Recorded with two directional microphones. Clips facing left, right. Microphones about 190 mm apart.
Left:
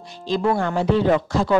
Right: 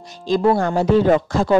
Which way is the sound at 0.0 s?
45° right (ahead or behind).